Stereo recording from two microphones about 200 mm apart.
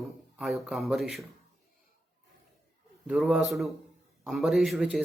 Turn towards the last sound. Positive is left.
turn(degrees=0)  # may be behind; listen again after turning